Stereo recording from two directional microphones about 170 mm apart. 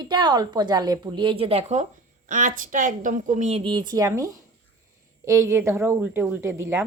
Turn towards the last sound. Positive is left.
turn(degrees=-15)  # may be behind; listen again after turning